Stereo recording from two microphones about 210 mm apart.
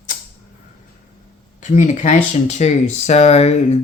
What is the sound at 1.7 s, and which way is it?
Speech, 35° left (ahead or behind).